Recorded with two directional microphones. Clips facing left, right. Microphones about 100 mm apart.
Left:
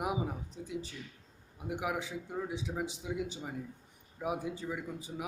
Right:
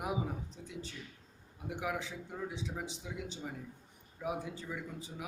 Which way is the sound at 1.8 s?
15° left (ahead or behind).